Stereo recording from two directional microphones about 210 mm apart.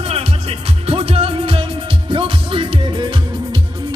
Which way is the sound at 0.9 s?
25° right (ahead or behind).